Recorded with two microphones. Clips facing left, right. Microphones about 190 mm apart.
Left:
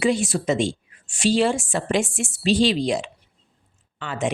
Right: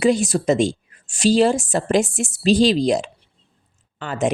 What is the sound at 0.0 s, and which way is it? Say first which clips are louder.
A woman's voice: right 4 dB; 40° right (ahead or behind).